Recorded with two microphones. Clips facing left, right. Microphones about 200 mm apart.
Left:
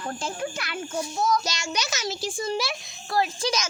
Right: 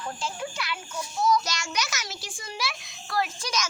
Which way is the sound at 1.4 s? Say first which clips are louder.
Left 2 dB; 25° left (ahead or behind).